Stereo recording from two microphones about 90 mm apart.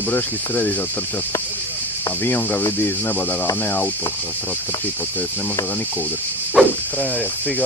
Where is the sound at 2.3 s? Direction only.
20° left (ahead or behind).